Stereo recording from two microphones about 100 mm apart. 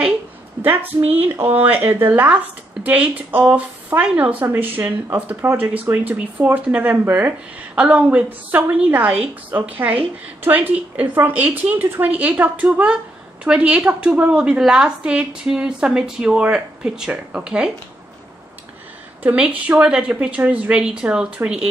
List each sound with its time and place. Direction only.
1.4 s a woman's voice: 20° right (ahead or behind)
19.2 s a woman's voice: 10° right (ahead or behind)